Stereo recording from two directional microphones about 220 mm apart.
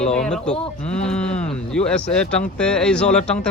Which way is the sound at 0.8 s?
30° left (ahead or behind).